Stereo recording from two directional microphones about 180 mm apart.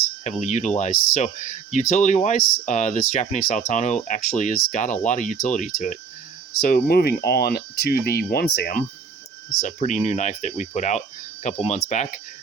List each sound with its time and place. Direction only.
0.3 s speech: 40° left (ahead or behind); by 8.8 s 60° left (ahead or behind)
9.6 s speech: 45° left (ahead or behind)